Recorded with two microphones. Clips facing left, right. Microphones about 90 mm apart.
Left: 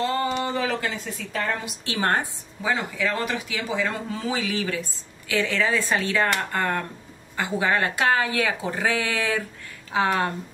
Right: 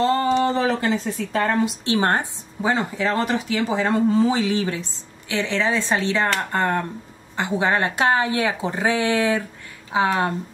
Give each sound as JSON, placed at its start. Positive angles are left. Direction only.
{"t": 0.0, "sound": "speech", "side_deg": -30}
{"t": 1.9, "sound": "speech", "side_deg": -25}